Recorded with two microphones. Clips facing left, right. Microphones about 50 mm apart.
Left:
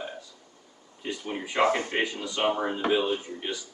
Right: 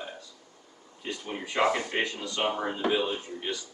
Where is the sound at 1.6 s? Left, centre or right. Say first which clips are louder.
Left 2 dB; left.